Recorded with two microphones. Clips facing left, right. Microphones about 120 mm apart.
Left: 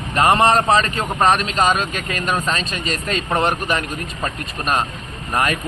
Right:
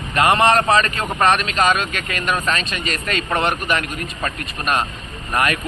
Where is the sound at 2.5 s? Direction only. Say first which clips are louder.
Even; 35° left (ahead or behind).